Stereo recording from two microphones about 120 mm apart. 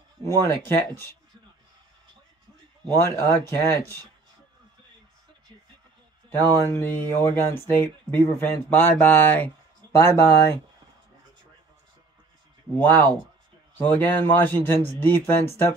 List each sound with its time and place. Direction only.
0.4 s speech: 20° left (ahead or behind)
2.9 s speech: 20° left (ahead or behind)
6.3 s speech: 20° left (ahead or behind)
12.7 s speech: 15° left (ahead or behind)